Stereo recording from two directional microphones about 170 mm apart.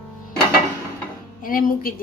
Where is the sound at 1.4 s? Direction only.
55° left (ahead or behind).